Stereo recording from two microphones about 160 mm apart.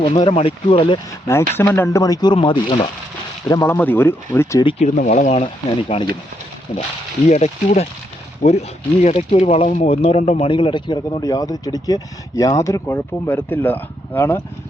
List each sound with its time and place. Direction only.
0.0 s speech: 35° left (ahead or behind)
1.5 s speech: 15° left (ahead or behind); by 2.8 s 30° left (ahead or behind)
3.5 s speech: 15° left (ahead or behind)
4.9 s speech: 50° left (ahead or behind)
5.9 s speech: 30° left (ahead or behind)
7.3 s speech: 45° left (ahead or behind); by 14.4 s 15° left (ahead or behind)